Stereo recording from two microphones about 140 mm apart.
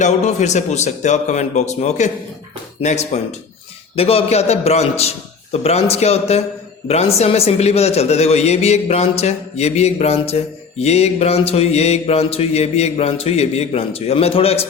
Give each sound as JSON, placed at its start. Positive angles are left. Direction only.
{"t": 0.0, "sound": "a man's voice", "side_deg": 55}